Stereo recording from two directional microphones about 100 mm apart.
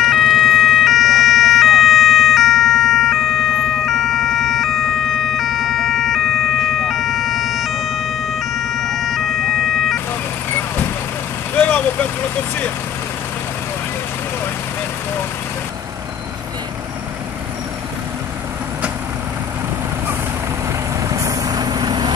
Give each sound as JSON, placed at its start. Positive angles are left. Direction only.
{"t": 0.0, "sound": "ambulance", "side_deg": -5}
{"t": 11.5, "sound": "vehicle", "side_deg": 15}
{"t": 21.1, "sound": "vehicle", "side_deg": -35}